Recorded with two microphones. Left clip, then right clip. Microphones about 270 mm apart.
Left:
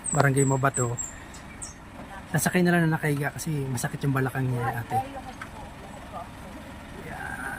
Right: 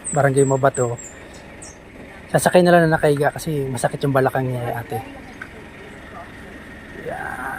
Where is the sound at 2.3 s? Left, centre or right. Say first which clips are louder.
Right 12 dB; centre.